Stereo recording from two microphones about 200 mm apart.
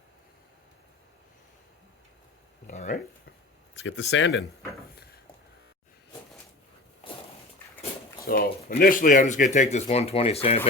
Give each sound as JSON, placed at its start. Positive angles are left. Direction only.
{"t": 2.6, "sound": "speech", "side_deg": 40}
{"t": 3.8, "sound": "speech", "side_deg": 65}
{"t": 8.2, "sound": "a sound", "side_deg": 45}
{"t": 8.8, "sound": "speech", "side_deg": 40}